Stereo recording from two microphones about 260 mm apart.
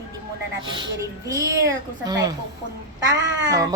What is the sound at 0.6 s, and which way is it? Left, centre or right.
A woman's voice, centre.